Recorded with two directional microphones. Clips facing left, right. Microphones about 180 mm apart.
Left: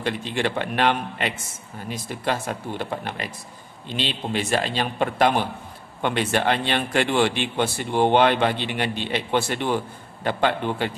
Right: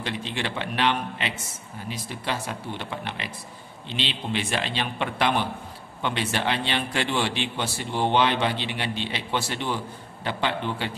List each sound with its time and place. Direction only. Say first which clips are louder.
0.0 s a man's voice: left 5 dB; 50° left (ahead or behind)